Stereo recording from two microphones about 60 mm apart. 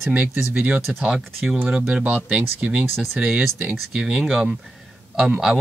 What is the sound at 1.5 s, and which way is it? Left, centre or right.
Speech, right.